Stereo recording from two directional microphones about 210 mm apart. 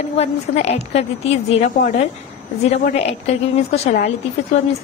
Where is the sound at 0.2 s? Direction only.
30° left (ahead or behind).